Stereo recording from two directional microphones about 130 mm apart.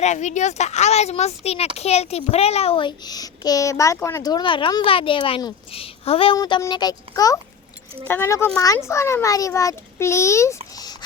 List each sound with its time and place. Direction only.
0.0 s a woman's voice: 65° left (ahead or behind); by 6.3 s 45° left (ahead or behind)
6.3 s speech: 30° left (ahead or behind)
8.0 s a child's voice: 20° left (ahead or behind)